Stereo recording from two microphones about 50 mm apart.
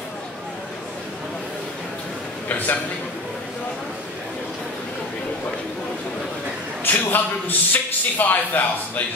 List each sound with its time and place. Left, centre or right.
6.8 s a man's voice: left